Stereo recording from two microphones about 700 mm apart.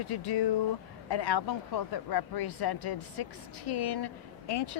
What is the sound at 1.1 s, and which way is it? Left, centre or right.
Speech, left.